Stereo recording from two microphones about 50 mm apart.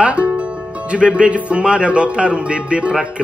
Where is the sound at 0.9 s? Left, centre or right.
Right.